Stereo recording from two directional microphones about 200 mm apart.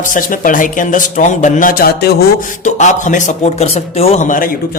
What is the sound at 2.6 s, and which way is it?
Speech, 35° left (ahead or behind).